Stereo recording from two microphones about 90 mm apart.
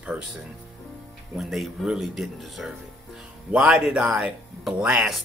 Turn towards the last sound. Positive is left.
turn(degrees=-5)  # may be behind; listen again after turning